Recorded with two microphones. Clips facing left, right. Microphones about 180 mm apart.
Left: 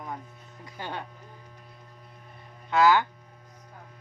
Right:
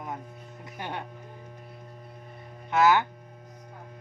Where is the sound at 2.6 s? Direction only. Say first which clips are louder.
Left 1 dB; 20° right (ahead or behind).